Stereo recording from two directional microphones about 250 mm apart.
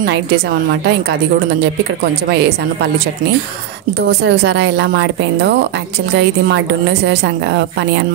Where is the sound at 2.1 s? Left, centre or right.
Right.